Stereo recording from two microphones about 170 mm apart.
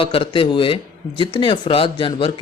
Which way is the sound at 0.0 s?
30° left (ahead or behind).